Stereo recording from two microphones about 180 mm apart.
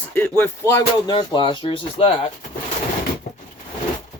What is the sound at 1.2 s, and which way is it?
Speech, 25° left (ahead or behind).